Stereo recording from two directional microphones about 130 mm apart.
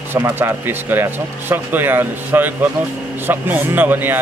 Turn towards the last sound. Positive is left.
turn(degrees=-15)  # may be behind; listen again after turning